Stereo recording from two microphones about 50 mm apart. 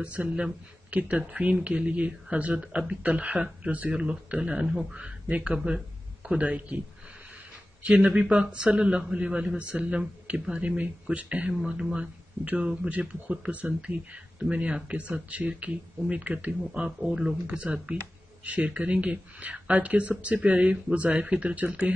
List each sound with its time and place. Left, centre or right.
0.0 s speech: right
3.3 s speech: centre
3.7 s speech: right
7.8 s speech: right
16.7 s speech: centre
17.5 s speech: right